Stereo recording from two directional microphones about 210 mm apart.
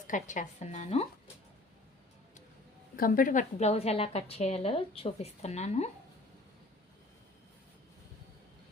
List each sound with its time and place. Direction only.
0.1 s a woman's voice: 35° left (ahead or behind)
2.9 s a woman's voice: 40° left (ahead or behind)